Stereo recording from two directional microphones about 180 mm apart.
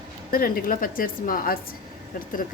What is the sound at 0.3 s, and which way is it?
A woman's voice, 55° left (ahead or behind).